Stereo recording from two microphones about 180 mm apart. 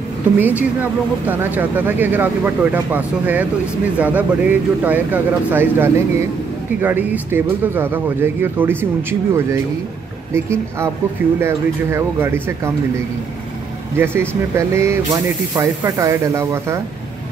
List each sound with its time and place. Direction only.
0.4 s speech: 10° right (ahead or behind)
10.3 s speech: 15° right (ahead or behind)